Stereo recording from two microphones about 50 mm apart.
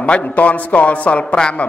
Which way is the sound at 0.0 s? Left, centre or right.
Left.